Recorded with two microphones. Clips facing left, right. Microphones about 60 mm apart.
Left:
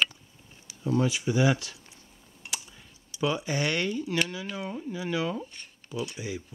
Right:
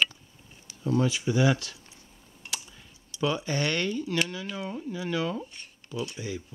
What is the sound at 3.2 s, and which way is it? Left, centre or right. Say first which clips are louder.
Speech: even; centre.